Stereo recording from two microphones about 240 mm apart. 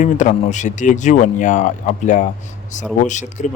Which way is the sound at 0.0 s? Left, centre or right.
Left.